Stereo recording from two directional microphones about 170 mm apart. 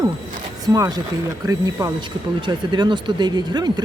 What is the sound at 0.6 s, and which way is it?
Speech, 20° right (ahead or behind).